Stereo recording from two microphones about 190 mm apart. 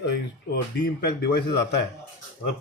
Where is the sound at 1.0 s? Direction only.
60° left (ahead or behind).